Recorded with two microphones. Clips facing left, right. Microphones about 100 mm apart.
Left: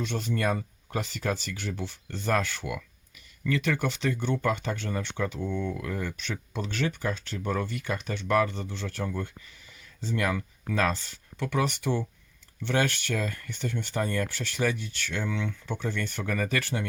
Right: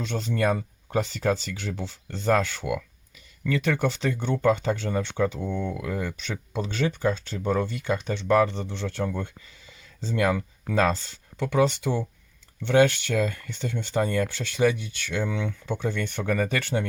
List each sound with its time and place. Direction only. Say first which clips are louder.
0.2 s speech: right 5 dB; 25° right (ahead or behind)